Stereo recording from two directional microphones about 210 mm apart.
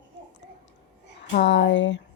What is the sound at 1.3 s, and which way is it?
Speech, 55° left (ahead or behind).